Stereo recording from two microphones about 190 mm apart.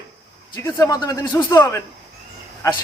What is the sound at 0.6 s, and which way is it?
A man's voice, 20° left (ahead or behind).